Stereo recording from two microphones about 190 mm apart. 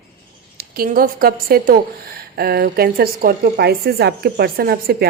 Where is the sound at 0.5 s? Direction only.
50° right (ahead or behind).